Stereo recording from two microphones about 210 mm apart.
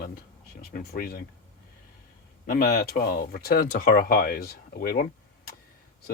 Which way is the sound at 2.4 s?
45° left (ahead or behind).